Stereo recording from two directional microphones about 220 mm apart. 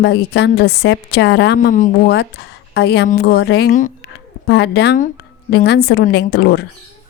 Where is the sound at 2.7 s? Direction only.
50° left (ahead or behind).